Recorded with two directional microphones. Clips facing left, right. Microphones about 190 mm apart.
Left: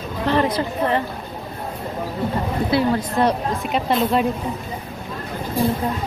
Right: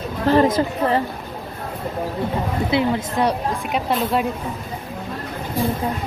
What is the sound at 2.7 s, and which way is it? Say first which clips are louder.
Speech: left 1 dB; 10° right (ahead or behind).